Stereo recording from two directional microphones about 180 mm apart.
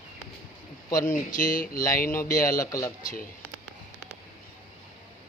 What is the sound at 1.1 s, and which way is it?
Speech, 50° left (ahead or behind).